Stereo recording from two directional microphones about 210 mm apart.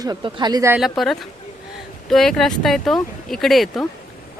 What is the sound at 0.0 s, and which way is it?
Speech, 20° right (ahead or behind).